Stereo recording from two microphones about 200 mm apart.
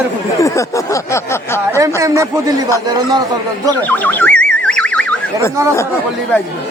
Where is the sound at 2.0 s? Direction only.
15° right (ahead or behind).